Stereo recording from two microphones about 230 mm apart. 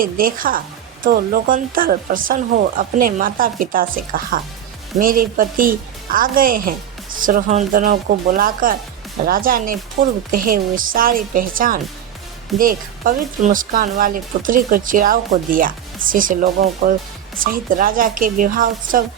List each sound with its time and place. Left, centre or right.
0.0 s speech: right